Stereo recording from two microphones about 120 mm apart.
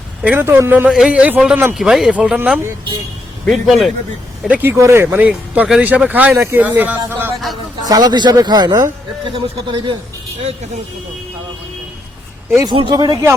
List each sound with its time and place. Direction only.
0.2 s speech: 15° right (ahead or behind)
0.9 s speech: 5° right (ahead or behind)
1.7 s speech: 5° right (ahead or behind)
4.4 s speech: 10° right (ahead or behind)
4.8 s speech: 20° right (ahead or behind)
7.9 s a man's voice: 35° right (ahead or behind)
12.6 s a man's voice: 45° right (ahead or behind)